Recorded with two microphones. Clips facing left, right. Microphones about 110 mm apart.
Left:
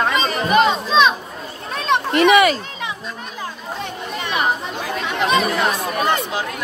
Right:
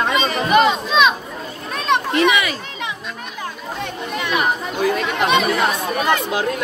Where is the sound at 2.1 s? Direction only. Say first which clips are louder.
Left 8 dB; 45° left (ahead or behind).